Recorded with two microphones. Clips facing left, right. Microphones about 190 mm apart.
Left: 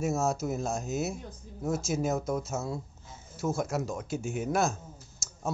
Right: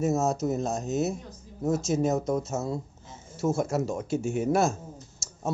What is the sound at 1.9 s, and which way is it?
Speech, 5° left (ahead or behind).